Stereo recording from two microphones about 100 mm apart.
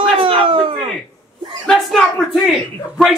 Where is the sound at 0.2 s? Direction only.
65° right (ahead or behind).